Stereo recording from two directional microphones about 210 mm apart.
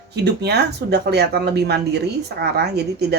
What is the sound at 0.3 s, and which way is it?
Speech, 50° right (ahead or behind).